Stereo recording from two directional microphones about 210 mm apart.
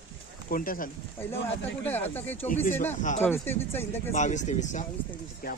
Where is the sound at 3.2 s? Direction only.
10° left (ahead or behind).